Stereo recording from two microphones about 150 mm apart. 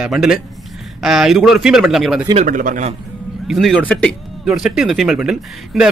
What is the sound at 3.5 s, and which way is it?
Speech, centre (ahead or behind).